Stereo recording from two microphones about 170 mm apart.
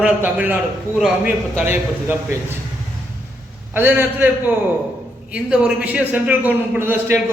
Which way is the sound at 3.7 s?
10° right (ahead or behind).